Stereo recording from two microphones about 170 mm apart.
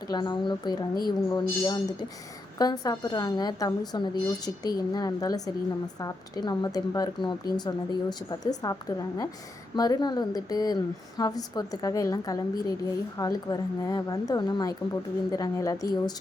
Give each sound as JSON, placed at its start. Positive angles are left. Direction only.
{"t": 0.1, "sound": "speech", "side_deg": 25}